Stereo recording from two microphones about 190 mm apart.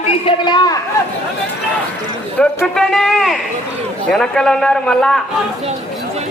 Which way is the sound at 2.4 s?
5° left (ahead or behind).